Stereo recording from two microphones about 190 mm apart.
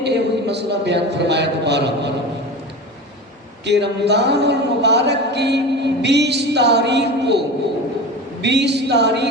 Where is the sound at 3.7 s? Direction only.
65° right (ahead or behind).